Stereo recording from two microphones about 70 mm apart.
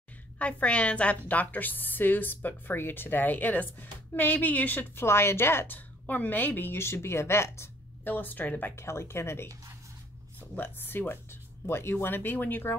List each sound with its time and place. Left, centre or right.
0.4 s a woman's voice: centre
5.0 s a woman's voice: left
8.0 s a woman's voice: left
8.7 s a woman's voice: left
10.5 s a woman's voice: left